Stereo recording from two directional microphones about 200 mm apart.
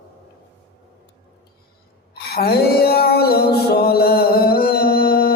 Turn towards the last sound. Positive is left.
turn(degrees=50)  # may be behind; listen again after turning